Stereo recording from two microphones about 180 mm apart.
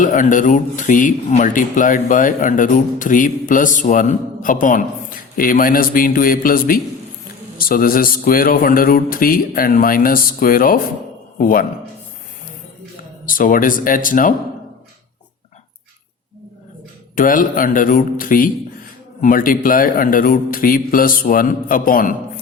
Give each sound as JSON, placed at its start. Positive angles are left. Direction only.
{"t": 0.0, "sound": "a man's voice", "side_deg": 45}
{"t": 13.2, "sound": "speech", "side_deg": 50}
{"t": 17.2, "sound": "speech", "side_deg": 50}